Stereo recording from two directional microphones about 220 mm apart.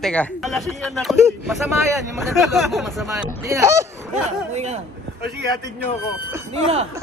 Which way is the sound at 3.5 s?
10° right (ahead or behind).